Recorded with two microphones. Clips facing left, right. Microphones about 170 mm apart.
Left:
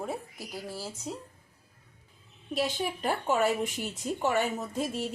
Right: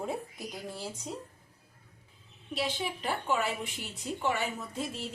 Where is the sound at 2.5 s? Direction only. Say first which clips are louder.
Left 3 dB; 45° left (ahead or behind).